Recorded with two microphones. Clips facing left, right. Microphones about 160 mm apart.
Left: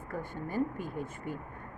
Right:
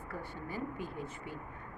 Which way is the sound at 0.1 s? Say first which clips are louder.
Left 6 dB; 50° left (ahead or behind).